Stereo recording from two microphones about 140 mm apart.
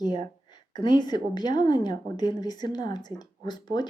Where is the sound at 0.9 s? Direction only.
30° left (ahead or behind).